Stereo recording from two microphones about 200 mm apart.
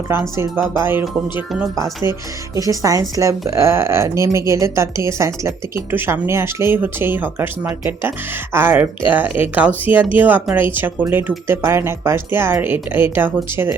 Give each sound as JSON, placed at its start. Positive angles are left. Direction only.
{"t": 0.1, "sound": "speech", "side_deg": -10}